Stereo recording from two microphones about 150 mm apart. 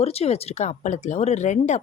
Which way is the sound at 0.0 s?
45° left (ahead or behind).